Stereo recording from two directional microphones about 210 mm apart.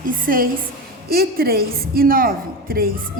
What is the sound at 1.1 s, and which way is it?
A woman's voice, 45° right (ahead or behind).